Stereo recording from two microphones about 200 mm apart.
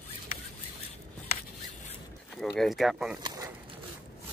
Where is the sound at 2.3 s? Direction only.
Centre (ahead or behind).